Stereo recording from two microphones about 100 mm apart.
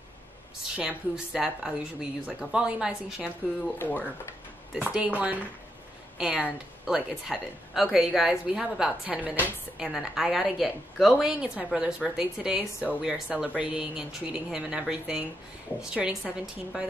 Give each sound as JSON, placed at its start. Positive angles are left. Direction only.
{"t": 0.7, "sound": "a woman's voice", "side_deg": -5}
{"t": 3.7, "sound": "speech", "side_deg": 20}
{"t": 4.7, "sound": "a woman's voice", "side_deg": -10}